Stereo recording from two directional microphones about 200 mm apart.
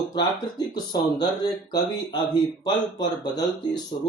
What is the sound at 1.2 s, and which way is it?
Speech, 20° left (ahead or behind).